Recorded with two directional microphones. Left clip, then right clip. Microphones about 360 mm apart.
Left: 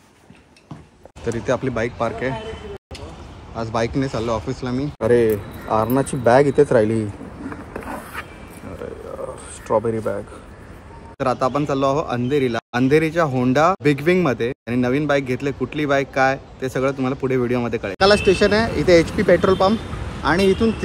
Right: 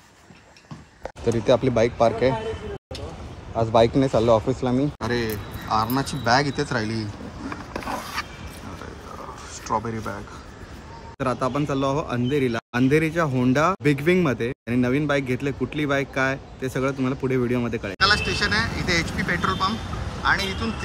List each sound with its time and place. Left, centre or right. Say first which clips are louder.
1.2 s speech: right 2 dB; centre
3.7 s speech: right 4 dB; centre
5.0 s a man's voice: left 10 dB; centre
7.4 s a sound: right 1 dB; right
9.7 s a man's voice: left 7 dB; centre